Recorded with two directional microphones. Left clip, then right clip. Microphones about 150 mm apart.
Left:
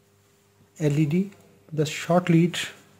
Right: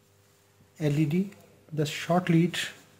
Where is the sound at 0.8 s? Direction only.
25° left (ahead or behind).